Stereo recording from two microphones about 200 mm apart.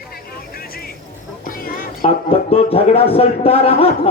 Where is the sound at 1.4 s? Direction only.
45° left (ahead or behind).